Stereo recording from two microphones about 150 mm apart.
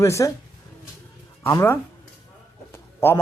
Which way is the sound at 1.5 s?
15° left (ahead or behind).